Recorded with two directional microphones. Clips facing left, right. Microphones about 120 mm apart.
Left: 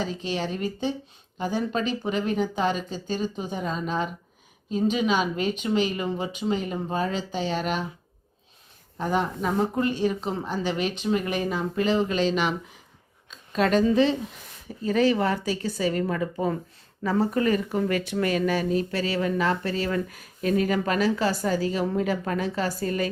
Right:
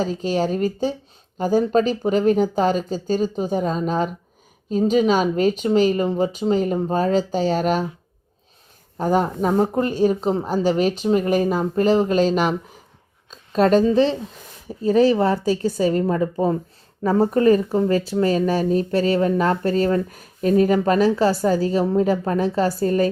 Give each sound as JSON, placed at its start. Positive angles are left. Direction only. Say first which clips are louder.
{"t": 0.0, "sound": "speech", "louder": "right 7 dB", "side_deg": -40}
{"t": 9.0, "sound": "a woman's voice", "louder": "right 6 dB", "side_deg": -40}